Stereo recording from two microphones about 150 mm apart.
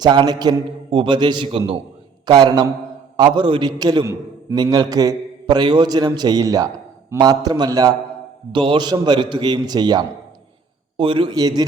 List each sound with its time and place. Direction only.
0.0 s a man's voice: 30° right (ahead or behind)